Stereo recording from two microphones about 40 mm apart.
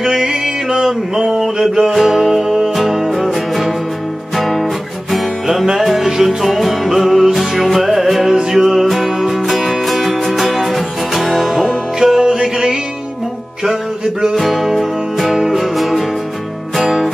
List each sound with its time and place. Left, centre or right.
0.0 s a sound: centre
3.3 s music: centre
14.3 s music: centre